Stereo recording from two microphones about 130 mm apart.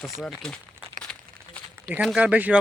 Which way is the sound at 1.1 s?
5° left (ahead or behind).